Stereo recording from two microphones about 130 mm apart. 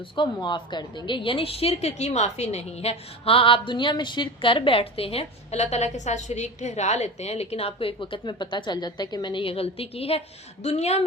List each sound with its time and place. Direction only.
0.2 s a woman's voice: 35° left (ahead or behind); by 11.0 s 55° left (ahead or behind)